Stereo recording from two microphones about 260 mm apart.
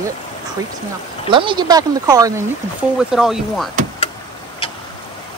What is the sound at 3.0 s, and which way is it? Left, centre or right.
Speech, centre.